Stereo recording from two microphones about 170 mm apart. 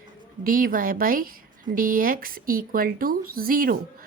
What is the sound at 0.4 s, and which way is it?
A woman's voice, 55° right (ahead or behind).